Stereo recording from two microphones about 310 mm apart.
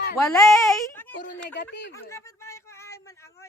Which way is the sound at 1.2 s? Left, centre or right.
Left.